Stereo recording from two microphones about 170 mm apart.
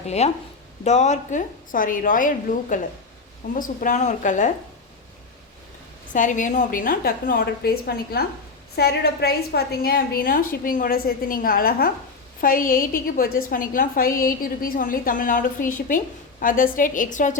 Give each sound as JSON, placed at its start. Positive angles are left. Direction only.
{"t": 0.2, "sound": "a woman's voice", "side_deg": 40}
{"t": 6.1, "sound": "a woman's voice", "side_deg": 50}